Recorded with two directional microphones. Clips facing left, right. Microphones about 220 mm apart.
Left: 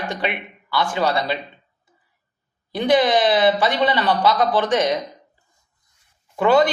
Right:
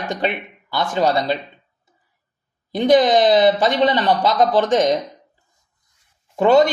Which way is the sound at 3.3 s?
45° right (ahead or behind).